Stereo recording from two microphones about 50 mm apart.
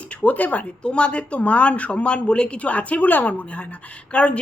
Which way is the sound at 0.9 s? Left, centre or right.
Left.